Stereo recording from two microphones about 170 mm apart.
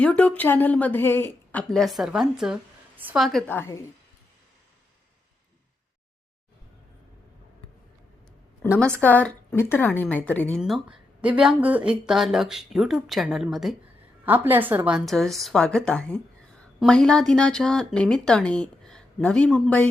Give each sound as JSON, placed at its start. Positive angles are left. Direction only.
{"t": 0.0, "sound": "a woman's voice", "side_deg": 5}
{"t": 1.7, "sound": "speech", "side_deg": 0}
{"t": 3.5, "sound": "a woman's voice", "side_deg": 15}
{"t": 8.6, "sound": "a sound", "side_deg": 5}
{"t": 9.0, "sound": "a woman's voice", "side_deg": 10}
{"t": 10.6, "sound": "a woman's voice", "side_deg": -5}